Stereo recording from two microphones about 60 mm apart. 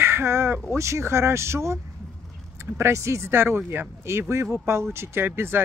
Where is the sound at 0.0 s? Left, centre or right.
Right.